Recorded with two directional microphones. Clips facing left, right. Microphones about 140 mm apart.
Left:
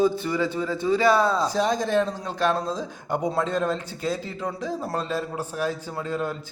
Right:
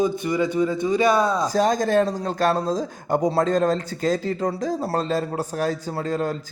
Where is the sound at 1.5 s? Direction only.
45° right (ahead or behind).